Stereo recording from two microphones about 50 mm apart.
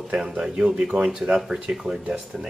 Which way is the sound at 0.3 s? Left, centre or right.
Centre.